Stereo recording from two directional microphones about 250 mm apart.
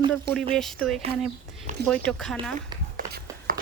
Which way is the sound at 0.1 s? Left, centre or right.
Centre.